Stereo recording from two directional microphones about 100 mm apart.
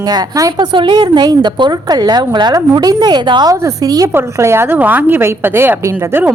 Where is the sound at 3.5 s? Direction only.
35° right (ahead or behind).